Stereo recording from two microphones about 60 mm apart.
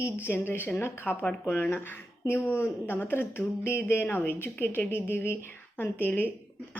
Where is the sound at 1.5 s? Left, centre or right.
Left.